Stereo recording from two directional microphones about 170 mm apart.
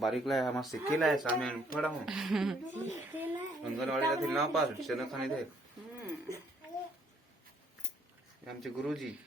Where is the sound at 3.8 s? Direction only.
Centre (ahead or behind).